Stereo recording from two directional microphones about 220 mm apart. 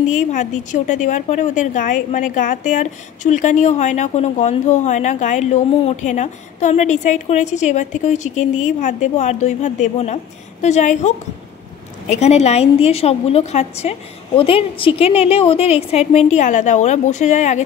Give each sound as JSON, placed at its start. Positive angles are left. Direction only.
{"t": 0.3, "sound": "a woman's voice", "side_deg": 35}